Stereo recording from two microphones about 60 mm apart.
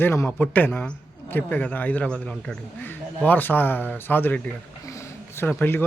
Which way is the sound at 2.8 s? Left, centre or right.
Left.